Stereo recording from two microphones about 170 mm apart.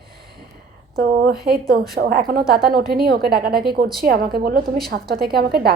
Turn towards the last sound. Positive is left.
turn(degrees=-65)  # may be behind; listen again after turning